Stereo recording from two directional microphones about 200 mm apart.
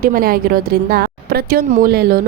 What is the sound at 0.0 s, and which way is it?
A woman's voice, 45° right (ahead or behind).